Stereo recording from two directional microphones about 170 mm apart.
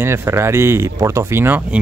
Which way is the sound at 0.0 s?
15° right (ahead or behind).